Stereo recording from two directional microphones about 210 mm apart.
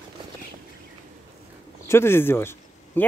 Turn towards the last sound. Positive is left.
turn(degrees=10)  # may be behind; listen again after turning